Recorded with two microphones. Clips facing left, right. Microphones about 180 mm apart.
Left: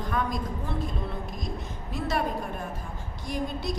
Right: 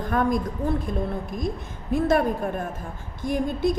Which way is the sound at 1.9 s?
55° right (ahead or behind).